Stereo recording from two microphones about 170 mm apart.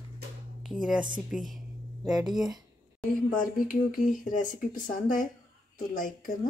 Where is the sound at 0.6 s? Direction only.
5° right (ahead or behind).